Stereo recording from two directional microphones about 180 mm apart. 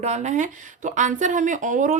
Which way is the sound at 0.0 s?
40° right (ahead or behind).